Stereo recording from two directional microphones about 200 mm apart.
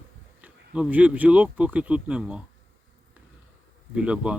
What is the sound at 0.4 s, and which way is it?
Speech, 5° right (ahead or behind).